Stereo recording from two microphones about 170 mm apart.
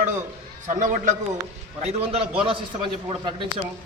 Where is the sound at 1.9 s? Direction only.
35° right (ahead or behind).